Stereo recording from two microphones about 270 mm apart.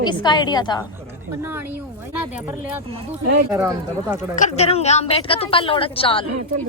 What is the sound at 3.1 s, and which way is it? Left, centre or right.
Speech, centre.